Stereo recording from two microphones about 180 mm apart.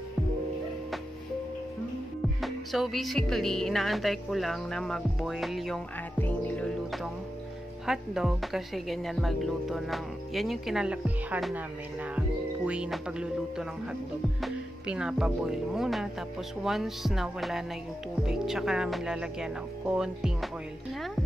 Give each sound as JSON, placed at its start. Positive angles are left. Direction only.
{"t": 2.4, "sound": "speech", "side_deg": 0}
{"t": 6.2, "sound": "music", "side_deg": 10}
{"t": 7.8, "sound": "speech", "side_deg": 0}